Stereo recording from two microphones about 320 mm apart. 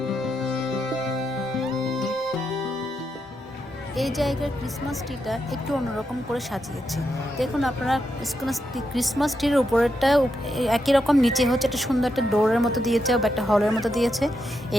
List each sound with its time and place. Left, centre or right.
0.1 s music: centre
3.9 s speech: centre